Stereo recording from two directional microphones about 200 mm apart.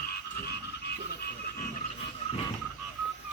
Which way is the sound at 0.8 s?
55° left (ahead or behind).